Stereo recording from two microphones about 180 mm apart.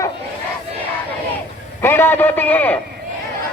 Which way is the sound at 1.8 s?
10° left (ahead or behind).